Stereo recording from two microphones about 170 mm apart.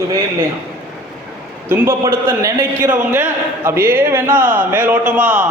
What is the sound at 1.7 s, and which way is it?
A man's voice, 15° right (ahead or behind).